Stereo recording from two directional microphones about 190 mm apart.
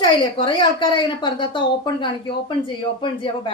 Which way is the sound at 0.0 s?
25° left (ahead or behind).